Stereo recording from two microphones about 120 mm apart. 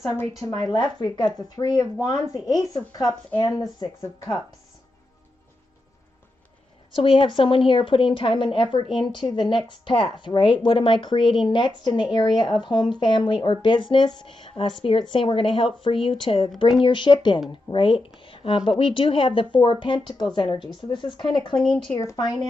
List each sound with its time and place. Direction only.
0.7 s speech: 35° left (ahead or behind)
7.0 s speech: 50° left (ahead or behind)